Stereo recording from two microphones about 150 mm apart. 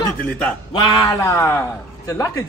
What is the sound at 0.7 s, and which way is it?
Speech, 30° left (ahead or behind).